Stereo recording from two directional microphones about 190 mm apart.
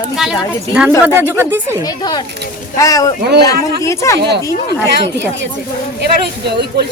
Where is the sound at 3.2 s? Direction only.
55° right (ahead or behind).